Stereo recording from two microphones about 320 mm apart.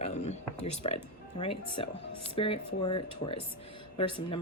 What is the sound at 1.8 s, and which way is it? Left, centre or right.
Speech, centre.